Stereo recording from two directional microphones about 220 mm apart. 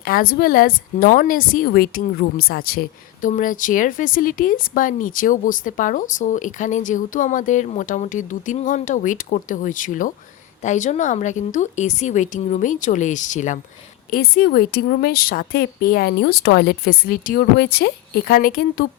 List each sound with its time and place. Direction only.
0.0 s a woman's voice: 40° left (ahead or behind)